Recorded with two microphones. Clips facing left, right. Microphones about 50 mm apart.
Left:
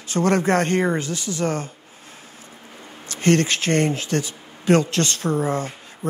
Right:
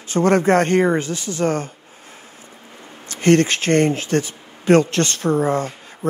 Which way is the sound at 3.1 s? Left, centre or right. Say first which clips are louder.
Right 4 dB; right.